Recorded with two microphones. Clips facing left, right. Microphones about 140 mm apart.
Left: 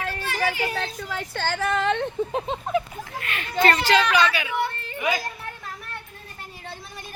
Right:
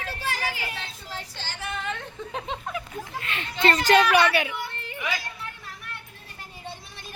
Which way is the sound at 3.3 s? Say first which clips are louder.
Left 3 dB; 25° right (ahead or behind).